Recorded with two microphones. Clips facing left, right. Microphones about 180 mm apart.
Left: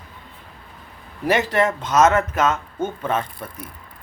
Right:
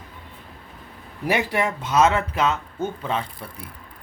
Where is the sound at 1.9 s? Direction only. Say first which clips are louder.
Left 1 dB; 40° left (ahead or behind).